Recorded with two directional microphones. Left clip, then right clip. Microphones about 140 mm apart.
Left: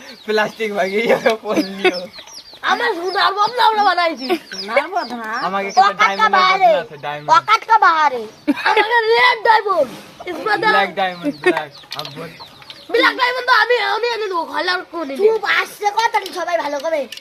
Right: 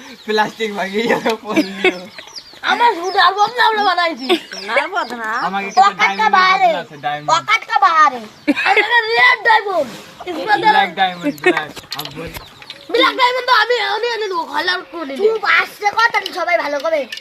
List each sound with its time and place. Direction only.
0.3 s speech: 40° left (ahead or behind)
1.5 s speech: centre (ahead or behind)
2.6 s speech: 25° left (ahead or behind)
4.3 s speech: centre (ahead or behind)
5.2 s speech: 5° right (ahead or behind)
6.1 s speech: 25° left (ahead or behind)
8.4 s speech: centre (ahead or behind)
8.9 s speech: 45° left (ahead or behind); by 11.1 s 25° left (ahead or behind)
11.2 s speech: 5° left (ahead or behind)
12.9 s speech: 5° left (ahead or behind)
13.1 s speech: 5° right (ahead or behind)
14.5 s speech: 25° right (ahead or behind)
15.3 s speech: 25° left (ahead or behind)